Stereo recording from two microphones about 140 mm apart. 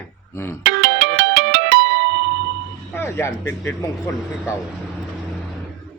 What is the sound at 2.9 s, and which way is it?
Speech, 15° left (ahead or behind).